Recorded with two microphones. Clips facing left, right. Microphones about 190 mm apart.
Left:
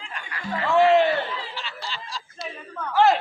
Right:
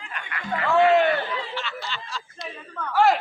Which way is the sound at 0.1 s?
35° left (ahead or behind).